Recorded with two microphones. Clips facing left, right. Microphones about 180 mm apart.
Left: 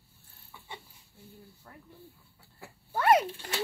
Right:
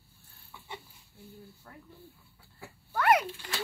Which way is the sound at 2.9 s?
25° left (ahead or behind).